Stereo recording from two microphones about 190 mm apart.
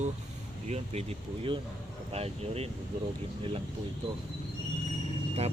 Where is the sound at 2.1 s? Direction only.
30° right (ahead or behind).